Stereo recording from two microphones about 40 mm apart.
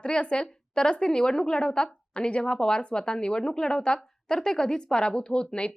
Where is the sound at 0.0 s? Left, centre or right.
Left.